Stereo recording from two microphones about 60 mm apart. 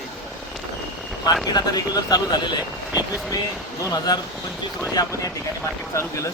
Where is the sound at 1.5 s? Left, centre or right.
Left.